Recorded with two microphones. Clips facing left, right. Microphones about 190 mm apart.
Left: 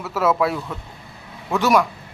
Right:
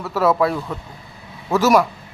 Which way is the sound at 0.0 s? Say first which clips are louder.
Right 2 dB; centre (ahead or behind).